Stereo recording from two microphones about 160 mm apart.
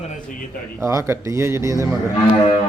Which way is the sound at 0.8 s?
15° right (ahead or behind).